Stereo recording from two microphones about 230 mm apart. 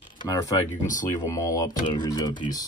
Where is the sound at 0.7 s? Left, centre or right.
Left.